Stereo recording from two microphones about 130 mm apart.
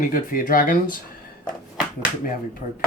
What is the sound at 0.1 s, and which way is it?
Speech, 90° left.